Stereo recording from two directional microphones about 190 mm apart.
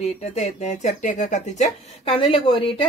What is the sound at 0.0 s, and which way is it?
Speech, 35° left (ahead or behind).